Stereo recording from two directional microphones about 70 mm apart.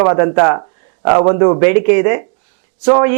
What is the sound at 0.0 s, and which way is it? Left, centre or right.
Speech, right.